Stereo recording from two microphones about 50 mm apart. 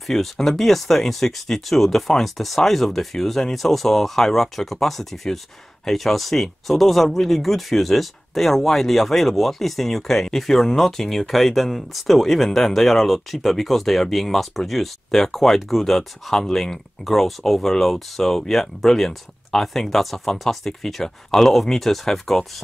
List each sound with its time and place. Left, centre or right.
0.0 s speech: centre